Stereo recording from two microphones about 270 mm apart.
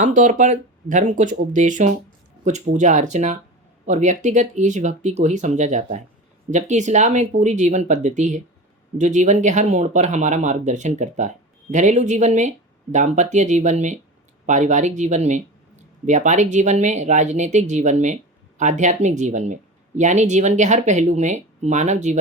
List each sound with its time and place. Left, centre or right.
0.0 s speech: right